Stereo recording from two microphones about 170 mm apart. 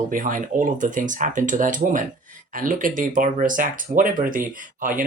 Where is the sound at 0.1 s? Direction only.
50° right (ahead or behind).